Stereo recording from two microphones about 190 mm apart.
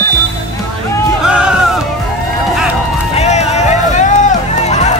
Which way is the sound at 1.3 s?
5° right (ahead or behind).